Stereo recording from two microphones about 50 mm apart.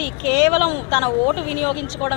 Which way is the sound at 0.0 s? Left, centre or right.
Centre.